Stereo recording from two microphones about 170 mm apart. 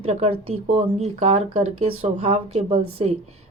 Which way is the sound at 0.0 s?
35° right (ahead or behind).